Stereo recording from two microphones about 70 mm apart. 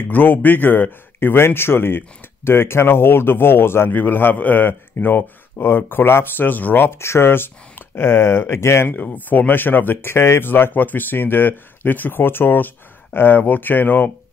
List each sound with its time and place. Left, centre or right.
0.1 s speech: left